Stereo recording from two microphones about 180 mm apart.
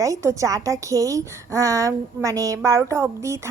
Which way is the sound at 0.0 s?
15° right (ahead or behind).